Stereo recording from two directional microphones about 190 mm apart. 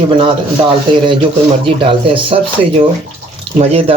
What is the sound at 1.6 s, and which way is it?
Speech, 30° right (ahead or behind).